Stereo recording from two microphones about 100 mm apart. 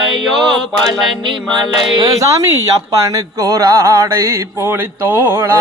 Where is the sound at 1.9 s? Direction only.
35° right (ahead or behind).